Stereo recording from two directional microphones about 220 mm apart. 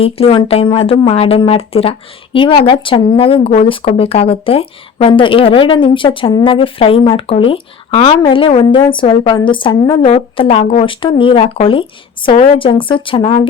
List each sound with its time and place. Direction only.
0.0 s speech: 25° left (ahead or behind)